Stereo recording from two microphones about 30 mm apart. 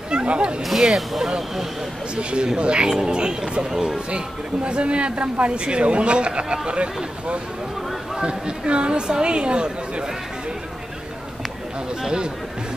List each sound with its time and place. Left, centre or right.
0.1 s speech: right
0.6 s speech: centre
2.1 s a man's voice: right
3.7 s speech: centre
4.6 s a man's voice: right
8.2 s a man's voice: right
12.0 s speech: right